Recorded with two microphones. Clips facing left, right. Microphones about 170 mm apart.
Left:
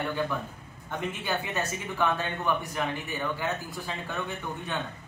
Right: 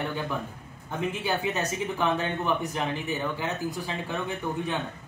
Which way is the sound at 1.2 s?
15° right (ahead or behind).